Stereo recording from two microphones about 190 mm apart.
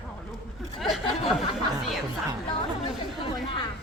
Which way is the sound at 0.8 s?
Centre (ahead or behind).